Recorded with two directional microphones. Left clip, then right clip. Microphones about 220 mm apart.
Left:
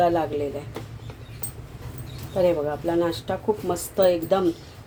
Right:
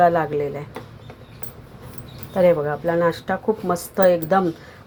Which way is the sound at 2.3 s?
15° right (ahead or behind).